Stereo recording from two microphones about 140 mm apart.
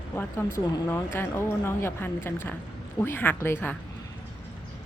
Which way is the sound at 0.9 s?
15° left (ahead or behind).